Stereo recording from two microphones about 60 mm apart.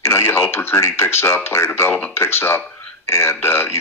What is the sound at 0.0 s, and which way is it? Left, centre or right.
Speech, left.